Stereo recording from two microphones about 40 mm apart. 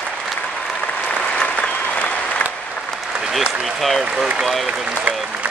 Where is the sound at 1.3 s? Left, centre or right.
Left.